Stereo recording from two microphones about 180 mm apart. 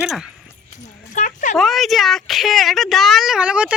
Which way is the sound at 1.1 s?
45° left (ahead or behind).